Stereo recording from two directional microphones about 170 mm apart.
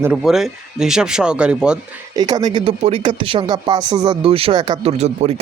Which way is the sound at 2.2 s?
25° right (ahead or behind).